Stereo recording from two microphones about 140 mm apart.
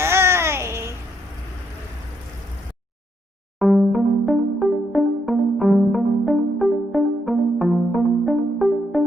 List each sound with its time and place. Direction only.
0.0 s babbling: 20° right (ahead or behind)
3.6 s music: centre (ahead or behind)